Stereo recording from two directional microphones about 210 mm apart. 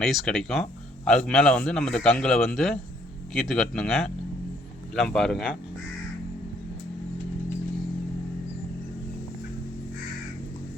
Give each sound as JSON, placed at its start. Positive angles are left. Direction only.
{"t": 0.0, "sound": "speech", "side_deg": 0}